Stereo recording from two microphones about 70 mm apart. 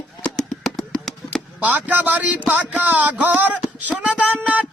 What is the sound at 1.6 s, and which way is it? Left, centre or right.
Speech, right.